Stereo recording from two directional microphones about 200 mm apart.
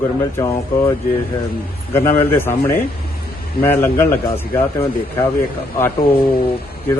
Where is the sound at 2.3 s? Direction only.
10° left (ahead or behind).